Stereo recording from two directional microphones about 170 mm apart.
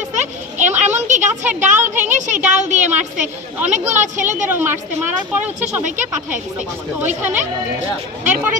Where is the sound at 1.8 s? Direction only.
45° right (ahead or behind).